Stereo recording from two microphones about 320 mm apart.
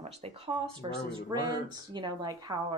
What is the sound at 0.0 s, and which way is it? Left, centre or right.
Speech, centre.